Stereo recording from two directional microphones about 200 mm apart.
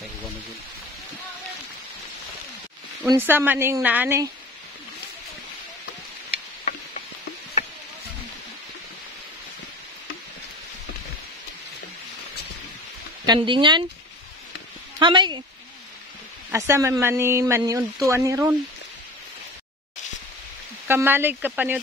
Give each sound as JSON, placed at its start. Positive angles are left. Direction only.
{"t": 3.1, "sound": "speech", "side_deg": -10}
{"t": 13.2, "sound": "speech", "side_deg": -20}
{"t": 15.0, "sound": "a woman's voice", "side_deg": -20}
{"t": 16.5, "sound": "speech", "side_deg": -15}
{"t": 20.8, "sound": "speech", "side_deg": -10}